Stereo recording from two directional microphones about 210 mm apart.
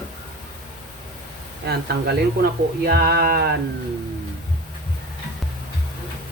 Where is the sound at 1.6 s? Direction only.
50° right (ahead or behind).